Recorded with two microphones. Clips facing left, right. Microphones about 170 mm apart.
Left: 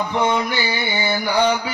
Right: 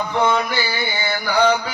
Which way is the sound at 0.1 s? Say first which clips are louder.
Right 3 dB; 20° left (ahead or behind).